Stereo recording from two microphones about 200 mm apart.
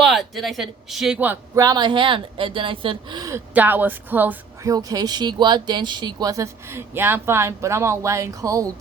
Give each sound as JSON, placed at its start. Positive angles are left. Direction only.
{"t": 0.0, "sound": "speech", "side_deg": 0}
{"t": 1.6, "sound": "speech", "side_deg": -20}